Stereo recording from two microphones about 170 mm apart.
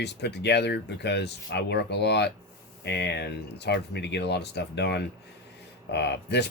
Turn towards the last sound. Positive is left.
turn(degrees=80)